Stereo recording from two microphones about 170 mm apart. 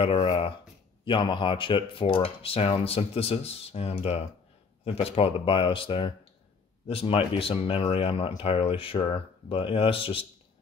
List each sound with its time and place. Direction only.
0.0 s speech: 35° left (ahead or behind)